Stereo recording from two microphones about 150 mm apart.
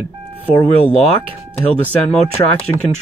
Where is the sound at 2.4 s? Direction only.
20° left (ahead or behind).